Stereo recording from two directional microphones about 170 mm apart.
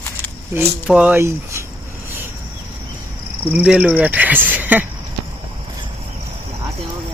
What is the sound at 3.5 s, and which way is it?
Speech, 10° right (ahead or behind).